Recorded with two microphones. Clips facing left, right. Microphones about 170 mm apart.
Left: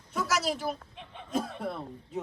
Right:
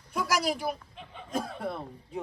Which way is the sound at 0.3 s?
10° right (ahead or behind).